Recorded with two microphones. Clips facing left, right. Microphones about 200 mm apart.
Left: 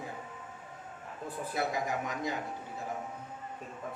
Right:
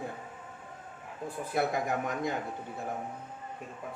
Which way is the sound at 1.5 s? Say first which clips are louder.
Right 4 dB; 55° right (ahead or behind).